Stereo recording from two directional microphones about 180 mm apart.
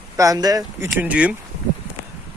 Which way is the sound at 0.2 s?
20° right (ahead or behind).